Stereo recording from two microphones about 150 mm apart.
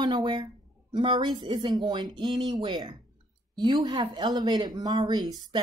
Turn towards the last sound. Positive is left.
turn(degrees=-25)  # may be behind; listen again after turning